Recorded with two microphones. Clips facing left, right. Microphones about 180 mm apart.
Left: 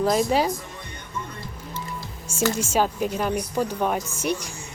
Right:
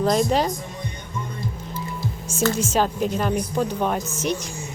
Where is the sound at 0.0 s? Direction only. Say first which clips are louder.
Right 1 dB; 5° left (ahead or behind).